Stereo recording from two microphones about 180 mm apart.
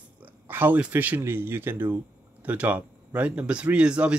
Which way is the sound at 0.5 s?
10° right (ahead or behind).